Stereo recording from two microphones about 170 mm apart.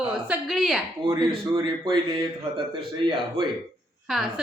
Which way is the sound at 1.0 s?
30° right (ahead or behind).